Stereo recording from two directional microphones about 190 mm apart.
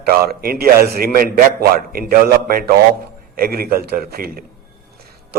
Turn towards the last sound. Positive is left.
turn(degrees=-50)  # may be behind; listen again after turning